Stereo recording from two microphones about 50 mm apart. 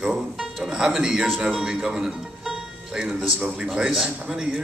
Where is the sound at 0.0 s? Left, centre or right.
Centre.